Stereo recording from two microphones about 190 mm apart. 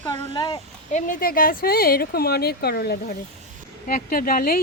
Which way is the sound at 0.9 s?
45° left (ahead or behind).